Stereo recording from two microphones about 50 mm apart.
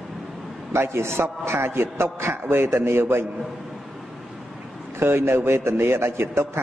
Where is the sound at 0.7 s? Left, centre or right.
Right.